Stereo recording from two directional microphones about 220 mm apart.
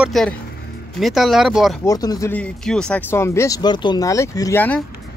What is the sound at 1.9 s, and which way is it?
Speech, 15° left (ahead or behind).